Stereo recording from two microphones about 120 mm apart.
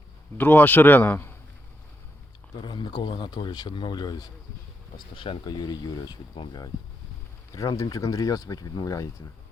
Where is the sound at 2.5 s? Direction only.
35° left (ahead or behind).